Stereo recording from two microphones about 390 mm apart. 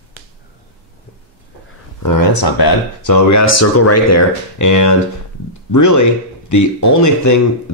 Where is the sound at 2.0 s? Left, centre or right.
Left.